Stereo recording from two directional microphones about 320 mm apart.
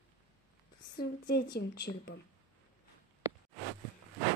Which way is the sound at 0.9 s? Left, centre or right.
Left.